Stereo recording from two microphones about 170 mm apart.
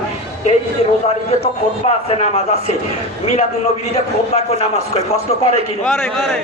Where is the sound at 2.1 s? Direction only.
40° left (ahead or behind).